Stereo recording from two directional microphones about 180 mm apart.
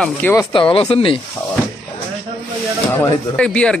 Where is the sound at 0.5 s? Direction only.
30° left (ahead or behind).